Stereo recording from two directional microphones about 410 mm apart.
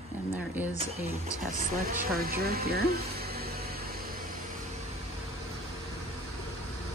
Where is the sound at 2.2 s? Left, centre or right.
Right.